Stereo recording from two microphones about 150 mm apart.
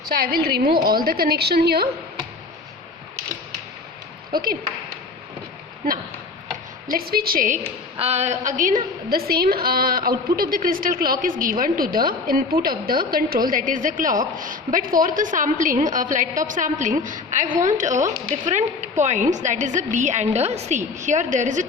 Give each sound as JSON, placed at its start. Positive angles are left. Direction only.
{"t": 0.1, "sound": "a woman's voice", "side_deg": -85}
{"t": 4.3, "sound": "speech", "side_deg": -75}
{"t": 6.9, "sound": "a woman's voice", "side_deg": -90}
{"t": 7.9, "sound": "a woman's voice", "side_deg": -45}